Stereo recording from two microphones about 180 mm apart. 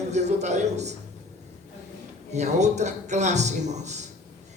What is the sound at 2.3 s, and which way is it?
A man's voice, 40° right (ahead or behind).